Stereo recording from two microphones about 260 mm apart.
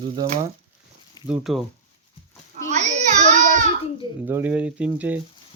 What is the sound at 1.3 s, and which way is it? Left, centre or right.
Speech, centre.